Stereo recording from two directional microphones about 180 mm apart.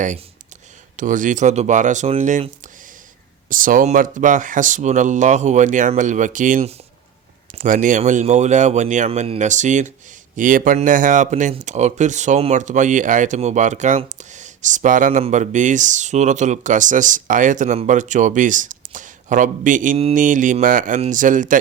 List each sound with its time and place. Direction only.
0.9 s speech: 45° right (ahead or behind)
3.5 s speech: 50° right (ahead or behind)